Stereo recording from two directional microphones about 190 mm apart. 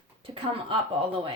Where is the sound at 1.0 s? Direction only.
30° right (ahead or behind).